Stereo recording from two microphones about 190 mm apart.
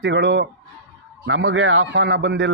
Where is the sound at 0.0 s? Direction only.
70° right (ahead or behind).